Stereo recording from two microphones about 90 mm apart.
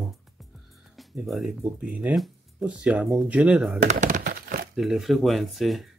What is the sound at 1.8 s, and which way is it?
Speech, 15° right (ahead or behind).